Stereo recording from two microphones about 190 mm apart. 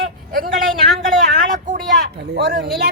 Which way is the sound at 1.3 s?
45° right (ahead or behind).